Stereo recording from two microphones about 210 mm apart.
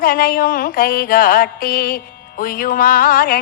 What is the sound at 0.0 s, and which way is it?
Music, 40° left (ahead or behind).